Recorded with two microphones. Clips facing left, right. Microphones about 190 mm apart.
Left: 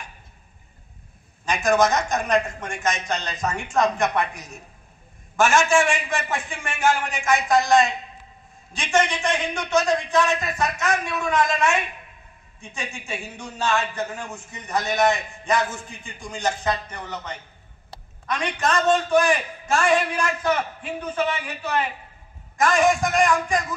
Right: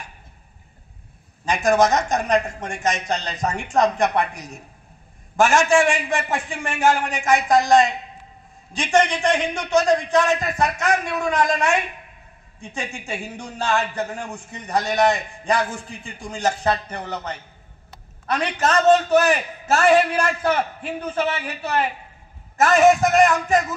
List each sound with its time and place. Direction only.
1.5 s a man's voice: 35° right (ahead or behind)
5.3 s a man's voice: 35° right (ahead or behind)
12.7 s a man's voice: 35° right (ahead or behind)